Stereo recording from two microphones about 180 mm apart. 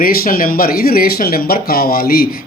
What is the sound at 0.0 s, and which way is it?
Speech, 55° left (ahead or behind).